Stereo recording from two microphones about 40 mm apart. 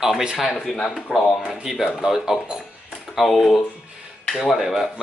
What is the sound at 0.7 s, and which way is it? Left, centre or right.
Speech, centre.